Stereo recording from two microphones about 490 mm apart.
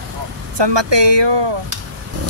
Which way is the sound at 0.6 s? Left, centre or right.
Right.